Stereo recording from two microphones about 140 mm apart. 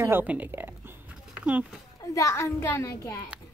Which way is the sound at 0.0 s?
15° right (ahead or behind).